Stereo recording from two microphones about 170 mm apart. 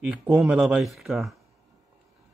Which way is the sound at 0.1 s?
5° right (ahead or behind).